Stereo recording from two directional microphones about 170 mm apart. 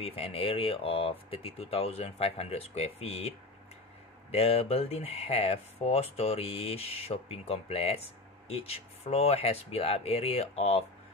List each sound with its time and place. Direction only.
0.0 s speech: 35° left (ahead or behind)